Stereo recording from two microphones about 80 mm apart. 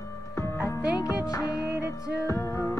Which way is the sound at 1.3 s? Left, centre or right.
Left.